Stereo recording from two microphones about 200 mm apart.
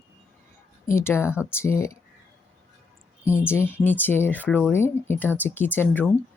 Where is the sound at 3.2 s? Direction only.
10° left (ahead or behind).